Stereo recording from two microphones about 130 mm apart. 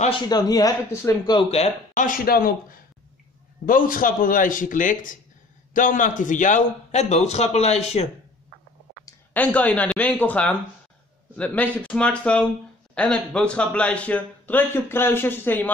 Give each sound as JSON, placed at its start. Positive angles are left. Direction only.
{"t": 0.3, "sound": "speech", "side_deg": 30}
{"t": 2.0, "sound": "a man's voice", "side_deg": 90}
{"t": 9.3, "sound": "a man's voice", "side_deg": 10}